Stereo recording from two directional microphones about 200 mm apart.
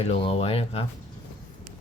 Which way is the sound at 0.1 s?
30° left (ahead or behind).